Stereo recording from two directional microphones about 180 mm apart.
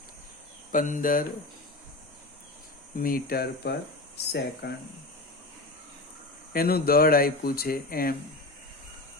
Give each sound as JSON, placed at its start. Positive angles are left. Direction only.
{"t": 0.7, "sound": "speech", "side_deg": 45}
{"t": 2.9, "sound": "speech", "side_deg": 50}
{"t": 6.5, "sound": "speech", "side_deg": 55}